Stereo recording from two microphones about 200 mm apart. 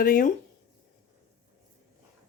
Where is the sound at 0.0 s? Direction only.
45° left (ahead or behind).